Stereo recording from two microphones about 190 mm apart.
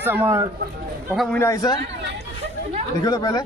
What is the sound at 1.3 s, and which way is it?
Speech, 15° left (ahead or behind).